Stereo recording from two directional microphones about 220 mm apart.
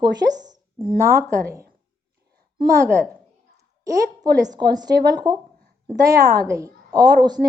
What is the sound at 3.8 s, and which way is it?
A woman's voice, 15° right (ahead or behind).